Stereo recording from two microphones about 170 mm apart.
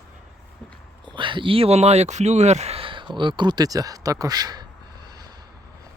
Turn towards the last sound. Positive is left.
turn(degrees=-25)  # may be behind; listen again after turning